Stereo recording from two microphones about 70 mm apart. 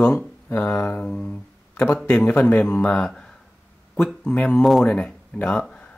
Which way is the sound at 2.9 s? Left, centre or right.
Centre.